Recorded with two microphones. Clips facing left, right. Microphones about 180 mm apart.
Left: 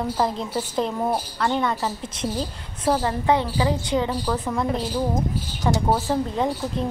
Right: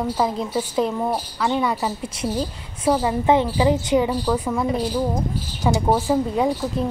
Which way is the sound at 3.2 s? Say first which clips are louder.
Right 5 dB; 20° right (ahead or behind).